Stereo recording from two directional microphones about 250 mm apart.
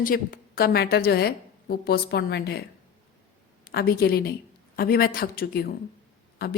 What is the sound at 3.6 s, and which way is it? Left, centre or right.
A woman's voice, left.